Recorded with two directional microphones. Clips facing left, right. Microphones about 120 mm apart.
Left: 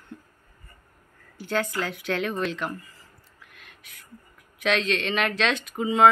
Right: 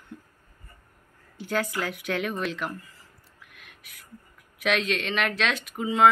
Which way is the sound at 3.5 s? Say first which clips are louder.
Left 1 dB; 10° right (ahead or behind).